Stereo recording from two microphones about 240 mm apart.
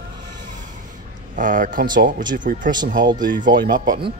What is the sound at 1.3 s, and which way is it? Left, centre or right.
Speech, right.